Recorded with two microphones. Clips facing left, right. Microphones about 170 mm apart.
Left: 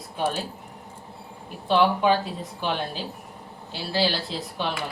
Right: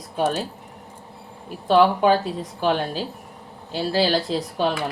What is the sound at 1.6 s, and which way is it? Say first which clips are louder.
A woman's voice: right 4 dB; 40° right (ahead or behind).